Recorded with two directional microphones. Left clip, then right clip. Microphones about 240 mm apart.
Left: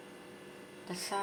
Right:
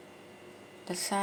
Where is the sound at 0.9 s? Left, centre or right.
Right.